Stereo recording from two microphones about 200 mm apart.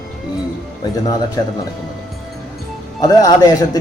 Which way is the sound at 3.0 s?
20° left (ahead or behind).